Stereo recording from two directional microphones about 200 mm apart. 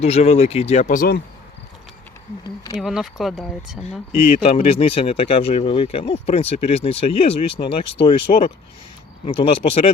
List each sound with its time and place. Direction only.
0.0 s speech: 30° left (ahead or behind); by 1.2 s 45° left (ahead or behind)
2.8 s speech: centre (ahead or behind)
4.4 s speech: 30° left (ahead or behind)